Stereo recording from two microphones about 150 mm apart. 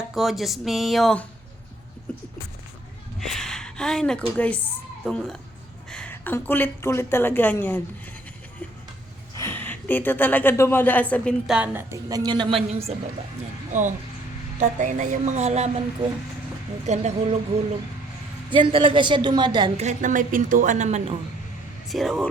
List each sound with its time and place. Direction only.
0.1 s speech: centre (ahead or behind)
3.2 s a sound: centre (ahead or behind)
4.4 s a woman's voice: 10° left (ahead or behind)
9.4 s speech: 15° left (ahead or behind)
11.4 s a woman's voice: 10° right (ahead or behind); by 13.0 s 40° right (ahead or behind)
13.7 s a woman's voice: 55° right (ahead or behind)
16.8 s a woman's voice: 50° right (ahead or behind)
18.5 s a woman's voice: 35° right (ahead or behind)
19.7 s a woman's voice: 50° right (ahead or behind)
21.8 s speech: centre (ahead or behind)